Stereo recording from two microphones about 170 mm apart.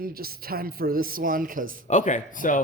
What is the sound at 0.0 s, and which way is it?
Speech, 60° right (ahead or behind).